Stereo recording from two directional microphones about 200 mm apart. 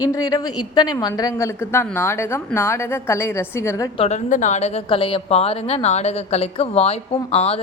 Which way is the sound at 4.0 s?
35° left (ahead or behind).